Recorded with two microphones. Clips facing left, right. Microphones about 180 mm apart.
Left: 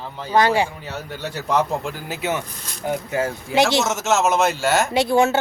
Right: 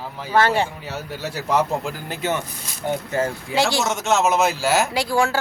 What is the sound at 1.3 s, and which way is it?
Speech, 5° right (ahead or behind).